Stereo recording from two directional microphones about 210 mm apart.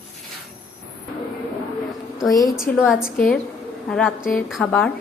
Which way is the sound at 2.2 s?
15° left (ahead or behind).